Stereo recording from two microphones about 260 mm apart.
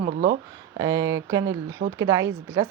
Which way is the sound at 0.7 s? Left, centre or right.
Centre.